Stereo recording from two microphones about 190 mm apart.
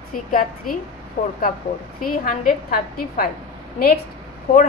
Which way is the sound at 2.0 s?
45° left (ahead or behind).